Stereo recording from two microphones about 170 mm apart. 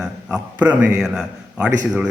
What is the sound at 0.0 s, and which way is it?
A man's voice, 5° right (ahead or behind).